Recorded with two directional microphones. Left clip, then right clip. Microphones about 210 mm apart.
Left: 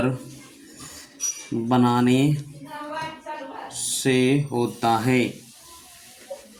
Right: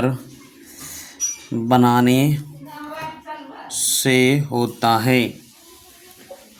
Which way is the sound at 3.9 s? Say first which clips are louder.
Right 4 dB; 45° right (ahead or behind).